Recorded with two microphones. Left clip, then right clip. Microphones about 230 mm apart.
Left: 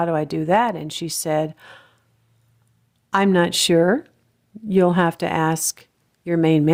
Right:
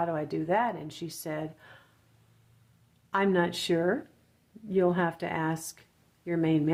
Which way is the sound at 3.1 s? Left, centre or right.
Left.